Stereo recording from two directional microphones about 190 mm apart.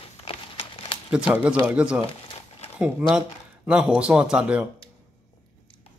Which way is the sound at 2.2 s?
30° left (ahead or behind).